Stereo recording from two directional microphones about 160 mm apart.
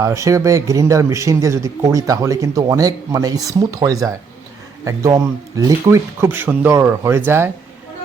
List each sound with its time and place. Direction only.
0.0 s speech: 20° right (ahead or behind)